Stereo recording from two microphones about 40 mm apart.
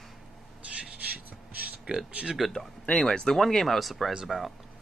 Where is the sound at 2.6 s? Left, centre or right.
Centre.